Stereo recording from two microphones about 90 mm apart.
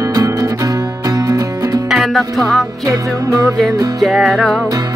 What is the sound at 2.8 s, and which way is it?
Music, 40° right (ahead or behind).